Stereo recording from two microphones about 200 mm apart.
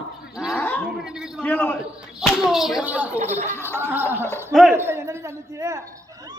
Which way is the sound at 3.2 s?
35° right (ahead or behind).